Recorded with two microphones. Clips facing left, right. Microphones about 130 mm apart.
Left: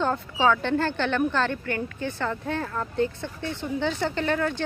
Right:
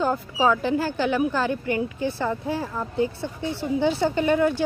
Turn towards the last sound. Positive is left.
turn(degrees=-10)  # may be behind; listen again after turning